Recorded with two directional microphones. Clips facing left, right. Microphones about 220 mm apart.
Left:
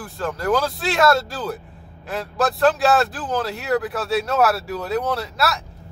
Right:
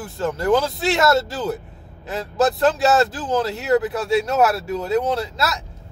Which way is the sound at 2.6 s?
20° right (ahead or behind).